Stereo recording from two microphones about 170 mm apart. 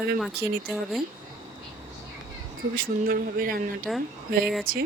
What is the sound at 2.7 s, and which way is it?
Speech, 55° right (ahead or behind).